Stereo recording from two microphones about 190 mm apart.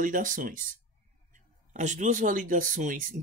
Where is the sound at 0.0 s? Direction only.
45° right (ahead or behind).